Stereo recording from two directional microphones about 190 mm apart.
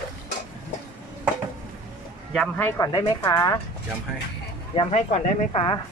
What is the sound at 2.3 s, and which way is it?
Speech, 5° left (ahead or behind).